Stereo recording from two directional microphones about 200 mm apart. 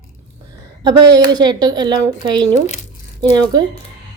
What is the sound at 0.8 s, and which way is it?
Speech, 20° right (ahead or behind).